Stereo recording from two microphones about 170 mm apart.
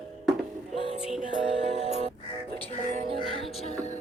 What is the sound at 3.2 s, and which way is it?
Music, 30° right (ahead or behind).